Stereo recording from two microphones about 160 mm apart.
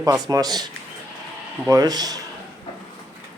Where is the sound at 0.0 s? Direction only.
20° right (ahead or behind).